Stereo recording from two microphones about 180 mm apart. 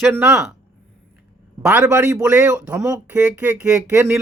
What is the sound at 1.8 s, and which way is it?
Speech, 15° right (ahead or behind).